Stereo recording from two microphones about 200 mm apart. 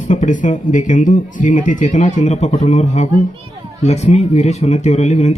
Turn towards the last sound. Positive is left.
turn(degrees=35)  # may be behind; listen again after turning